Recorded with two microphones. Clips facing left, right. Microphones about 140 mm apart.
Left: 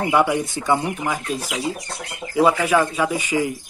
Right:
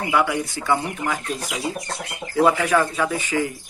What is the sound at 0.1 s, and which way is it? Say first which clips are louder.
A man's voice: left 1 dB; 20° left (ahead or behind).